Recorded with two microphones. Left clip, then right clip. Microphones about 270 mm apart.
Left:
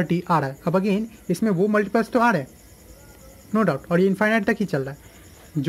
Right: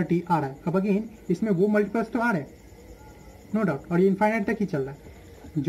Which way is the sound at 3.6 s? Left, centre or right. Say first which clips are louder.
Left 3 dB; centre.